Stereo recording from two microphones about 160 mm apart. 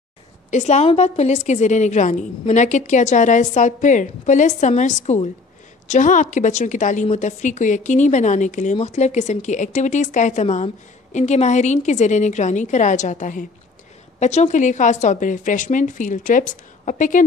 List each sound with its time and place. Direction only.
0.5 s a woman's voice: 45° left (ahead or behind)